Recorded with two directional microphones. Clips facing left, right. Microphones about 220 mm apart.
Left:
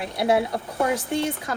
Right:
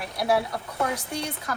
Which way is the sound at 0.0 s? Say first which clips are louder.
Left 3 dB; 25° left (ahead or behind).